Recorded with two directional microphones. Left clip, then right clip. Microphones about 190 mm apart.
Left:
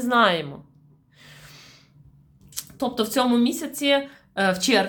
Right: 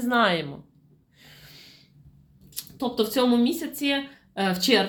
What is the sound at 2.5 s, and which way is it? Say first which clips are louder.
A woman's voice: left 1 dB; 25° left (ahead or behind).